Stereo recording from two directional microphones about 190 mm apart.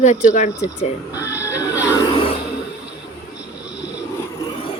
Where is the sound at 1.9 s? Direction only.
30° left (ahead or behind).